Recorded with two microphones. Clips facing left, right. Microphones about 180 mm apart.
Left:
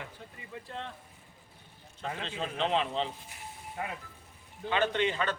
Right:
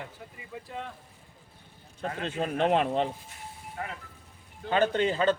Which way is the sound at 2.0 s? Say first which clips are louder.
Right 5 dB; 50° right (ahead or behind).